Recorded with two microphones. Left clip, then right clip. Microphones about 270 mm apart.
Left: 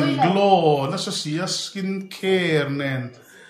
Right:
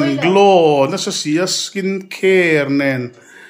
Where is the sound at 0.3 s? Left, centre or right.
Centre.